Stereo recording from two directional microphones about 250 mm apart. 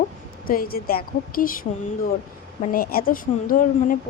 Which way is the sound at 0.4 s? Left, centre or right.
Left.